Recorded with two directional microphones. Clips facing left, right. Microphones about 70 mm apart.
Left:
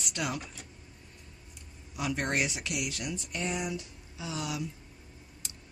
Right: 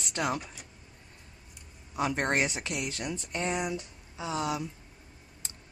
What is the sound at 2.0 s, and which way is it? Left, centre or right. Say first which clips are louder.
Speech: right 3 dB; right.